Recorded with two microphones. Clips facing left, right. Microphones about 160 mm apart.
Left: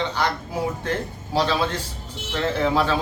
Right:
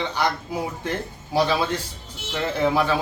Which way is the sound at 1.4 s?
10° right (ahead or behind).